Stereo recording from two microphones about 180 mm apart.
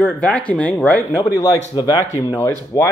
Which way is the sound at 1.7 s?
25° left (ahead or behind).